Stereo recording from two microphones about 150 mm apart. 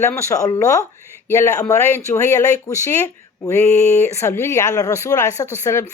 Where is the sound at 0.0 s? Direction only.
20° left (ahead or behind).